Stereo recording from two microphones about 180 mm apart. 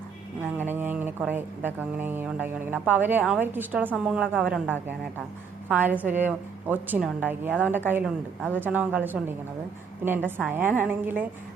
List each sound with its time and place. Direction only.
0.6 s speech: 10° right (ahead or behind)
5.6 s speech: 10° right (ahead or behind)